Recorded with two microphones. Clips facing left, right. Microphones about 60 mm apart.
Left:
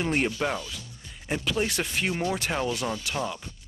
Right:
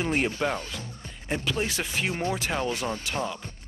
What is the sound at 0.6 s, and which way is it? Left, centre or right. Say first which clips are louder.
Speech: right 2 dB; right.